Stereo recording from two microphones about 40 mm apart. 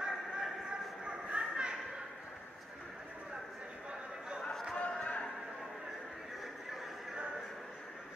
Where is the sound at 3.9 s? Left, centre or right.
Right.